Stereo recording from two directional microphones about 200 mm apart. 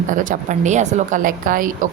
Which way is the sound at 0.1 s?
40° right (ahead or behind).